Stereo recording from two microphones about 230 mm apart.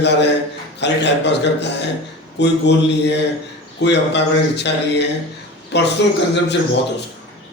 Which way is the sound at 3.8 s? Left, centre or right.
Left.